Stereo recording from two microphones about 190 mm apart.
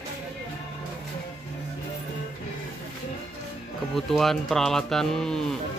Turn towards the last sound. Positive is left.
turn(degrees=5)  # may be behind; listen again after turning